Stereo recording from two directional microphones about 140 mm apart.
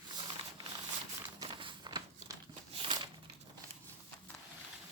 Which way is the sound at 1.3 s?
35° right (ahead or behind).